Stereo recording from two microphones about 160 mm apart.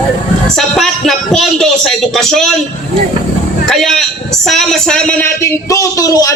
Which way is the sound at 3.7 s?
Centre (ahead or behind).